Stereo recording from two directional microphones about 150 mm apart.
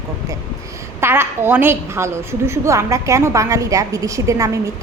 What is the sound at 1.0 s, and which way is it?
A woman's voice, 15° right (ahead or behind).